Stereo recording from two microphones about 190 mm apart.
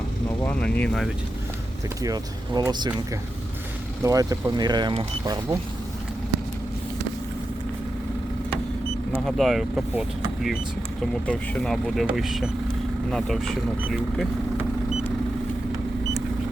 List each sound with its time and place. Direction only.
0.3 s speech: 10° left (ahead or behind)
2.0 s speech: 20° right (ahead or behind)
4.0 s speech: 20° right (ahead or behind)
9.1 s speech: centre (ahead or behind)